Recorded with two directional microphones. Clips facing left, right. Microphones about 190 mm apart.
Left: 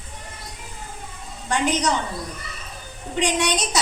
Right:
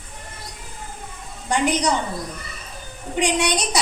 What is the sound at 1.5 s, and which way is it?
Speech, 10° right (ahead or behind).